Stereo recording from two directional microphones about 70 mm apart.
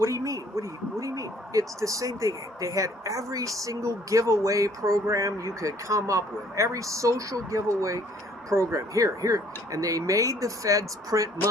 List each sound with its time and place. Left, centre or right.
0.0 s speech: right